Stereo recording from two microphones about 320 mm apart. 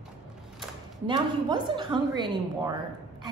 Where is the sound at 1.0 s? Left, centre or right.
Centre.